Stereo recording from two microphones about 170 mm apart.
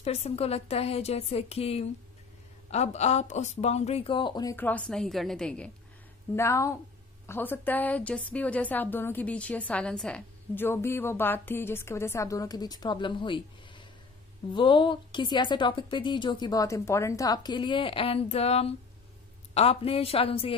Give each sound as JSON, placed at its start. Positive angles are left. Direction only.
{"t": 0.0, "sound": "a woman's voice", "side_deg": 40}
{"t": 4.6, "sound": "a woman's voice", "side_deg": 10}
{"t": 6.3, "sound": "a woman's voice", "side_deg": 15}